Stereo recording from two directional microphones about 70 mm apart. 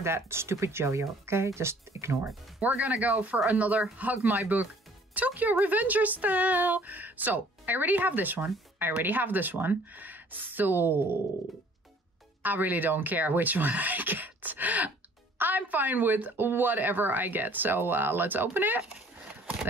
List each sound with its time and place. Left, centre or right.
0.0 s speech: right
2.6 s speech: right
12.4 s speech: right